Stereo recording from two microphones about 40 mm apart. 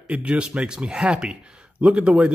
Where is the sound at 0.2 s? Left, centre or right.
Right.